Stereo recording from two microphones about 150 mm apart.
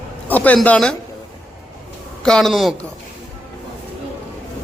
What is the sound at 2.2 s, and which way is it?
Speech, 5° left (ahead or behind).